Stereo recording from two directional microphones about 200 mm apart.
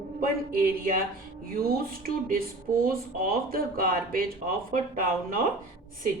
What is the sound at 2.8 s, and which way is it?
Speech, 45° right (ahead or behind).